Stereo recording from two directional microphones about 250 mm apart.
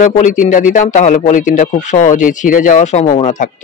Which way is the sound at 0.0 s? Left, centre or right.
Left.